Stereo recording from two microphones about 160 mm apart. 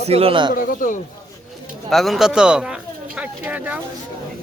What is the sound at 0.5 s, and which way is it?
Speech, 60° left (ahead or behind).